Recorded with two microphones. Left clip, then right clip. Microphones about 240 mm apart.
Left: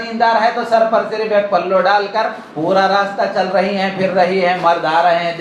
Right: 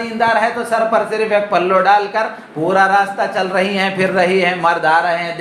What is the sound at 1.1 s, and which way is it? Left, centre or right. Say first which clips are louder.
Speech: even; right.